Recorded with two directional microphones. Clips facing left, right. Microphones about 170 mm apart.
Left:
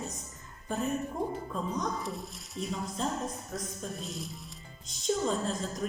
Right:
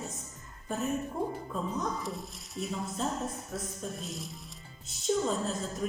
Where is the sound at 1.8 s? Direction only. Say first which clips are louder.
Even; centre (ahead or behind).